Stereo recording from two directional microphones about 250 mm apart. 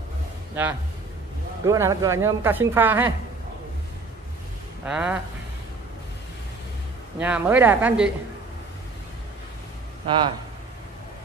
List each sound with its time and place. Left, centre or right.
1.7 s speech: centre
4.8 s speech: centre
7.2 s speech: centre
10.0 s speech: centre